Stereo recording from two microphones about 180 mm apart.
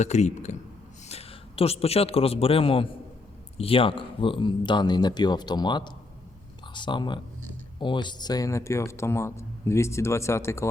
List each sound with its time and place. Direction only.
0.0 s a man's voice: 40° left (ahead or behind); by 10.7 s 15° left (ahead or behind)